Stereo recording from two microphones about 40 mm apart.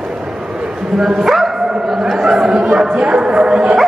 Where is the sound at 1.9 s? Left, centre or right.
Centre.